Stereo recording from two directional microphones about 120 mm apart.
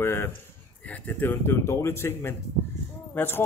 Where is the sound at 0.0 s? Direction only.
20° left (ahead or behind).